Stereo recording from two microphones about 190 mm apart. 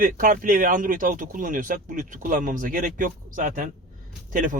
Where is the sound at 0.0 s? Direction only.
45° right (ahead or behind).